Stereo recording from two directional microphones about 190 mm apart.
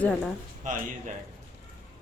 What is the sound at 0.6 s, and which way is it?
Speech, 40° right (ahead or behind).